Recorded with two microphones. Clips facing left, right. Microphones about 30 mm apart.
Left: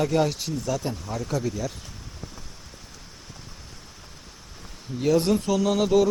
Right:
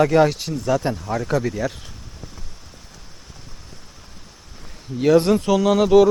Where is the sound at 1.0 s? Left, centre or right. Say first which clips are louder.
Right 7 dB; centre.